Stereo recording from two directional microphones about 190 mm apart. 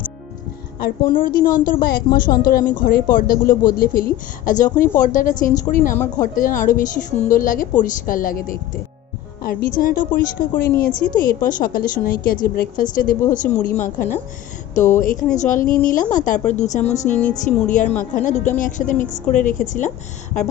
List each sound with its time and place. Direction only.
0.8 s a woman's voice: 50° left (ahead or behind)
17.0 s speech: 5° left (ahead or behind)
17.4 s a woman's voice: 40° left (ahead or behind)